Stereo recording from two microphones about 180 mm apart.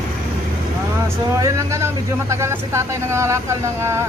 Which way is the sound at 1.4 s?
15° right (ahead or behind).